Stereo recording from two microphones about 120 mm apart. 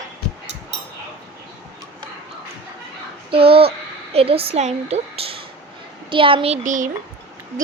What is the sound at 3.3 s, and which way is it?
A child's voice, 50° right (ahead or behind).